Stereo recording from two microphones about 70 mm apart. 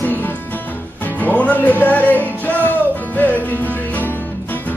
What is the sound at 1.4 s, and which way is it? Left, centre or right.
Music, left.